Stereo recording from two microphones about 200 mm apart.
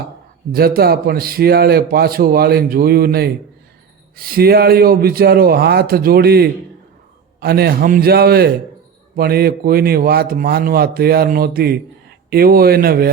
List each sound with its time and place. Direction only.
0.5 s a man's voice: 50° right (ahead or behind)